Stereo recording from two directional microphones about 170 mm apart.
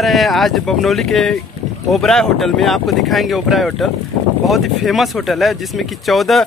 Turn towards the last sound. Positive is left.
turn(degrees=0)  # may be behind; listen again after turning